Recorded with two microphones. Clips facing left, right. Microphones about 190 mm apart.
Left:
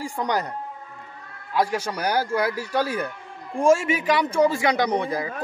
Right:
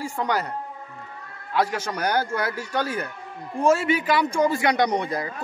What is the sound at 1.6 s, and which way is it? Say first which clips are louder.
A man's voice: left 1 dB; 10° left (ahead or behind).